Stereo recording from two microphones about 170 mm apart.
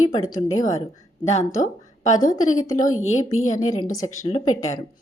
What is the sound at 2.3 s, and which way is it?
A woman's voice, 50° left (ahead or behind).